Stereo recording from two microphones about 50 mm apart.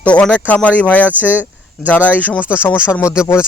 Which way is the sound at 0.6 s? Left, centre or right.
Left.